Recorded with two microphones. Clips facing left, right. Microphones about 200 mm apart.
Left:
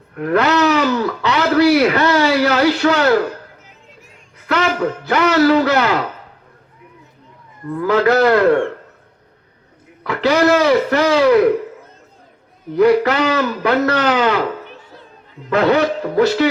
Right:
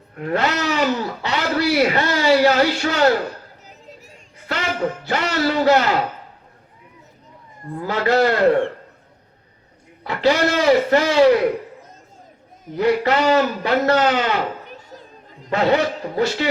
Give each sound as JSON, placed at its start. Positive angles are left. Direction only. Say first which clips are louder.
{"t": 0.1, "sound": "speech", "louder": "left 6 dB", "side_deg": 60}
{"t": 4.4, "sound": "a man's voice", "louder": "left 5 dB", "side_deg": 65}
{"t": 7.7, "sound": "speech", "louder": "left 5 dB", "side_deg": 60}
{"t": 10.0, "sound": "speech", "louder": "left 3 dB", "side_deg": 60}
{"t": 12.7, "sound": "speech", "louder": "left 5 dB", "side_deg": 60}
{"t": 14.7, "sound": "a sound", "louder": "even", "side_deg": -40}
{"t": 15.5, "sound": "speech", "louder": "left 4 dB", "side_deg": 65}